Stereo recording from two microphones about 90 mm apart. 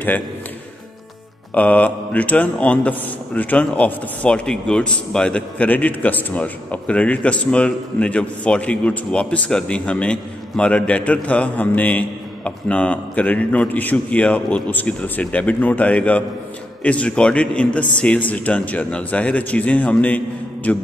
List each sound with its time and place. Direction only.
1.5 s a man's voice: 15° left (ahead or behind)